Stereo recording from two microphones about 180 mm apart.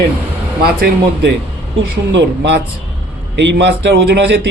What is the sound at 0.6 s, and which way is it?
Speech, 65° right (ahead or behind).